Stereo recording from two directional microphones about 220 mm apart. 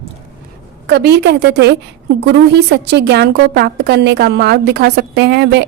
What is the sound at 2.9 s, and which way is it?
A woman's voice, 50° right (ahead or behind).